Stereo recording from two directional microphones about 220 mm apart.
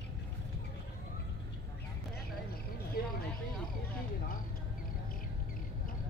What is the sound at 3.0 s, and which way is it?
Speech, 45° left (ahead or behind).